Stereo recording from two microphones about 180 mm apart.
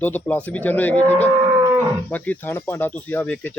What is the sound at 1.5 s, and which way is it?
Livestock, 15° right (ahead or behind).